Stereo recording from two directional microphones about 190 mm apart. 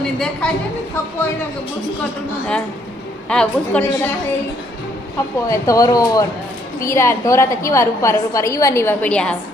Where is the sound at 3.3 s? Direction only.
5° left (ahead or behind).